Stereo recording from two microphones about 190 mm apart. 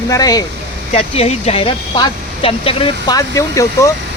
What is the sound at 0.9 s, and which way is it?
Speech, 30° left (ahead or behind).